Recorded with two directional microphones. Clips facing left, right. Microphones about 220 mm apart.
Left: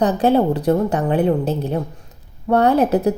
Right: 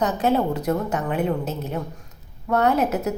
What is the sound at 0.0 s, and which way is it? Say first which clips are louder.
A woman's voice: left 5 dB; 35° left (ahead or behind).